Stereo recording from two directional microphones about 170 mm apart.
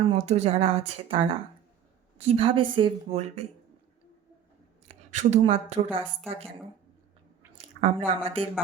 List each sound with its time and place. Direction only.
0.0 s speech: 35° right (ahead or behind)
4.9 s speech: 40° right (ahead or behind)
7.6 s speech: 35° right (ahead or behind)